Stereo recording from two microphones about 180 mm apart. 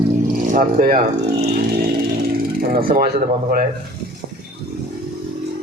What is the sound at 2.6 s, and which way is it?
Speech, 55° right (ahead or behind).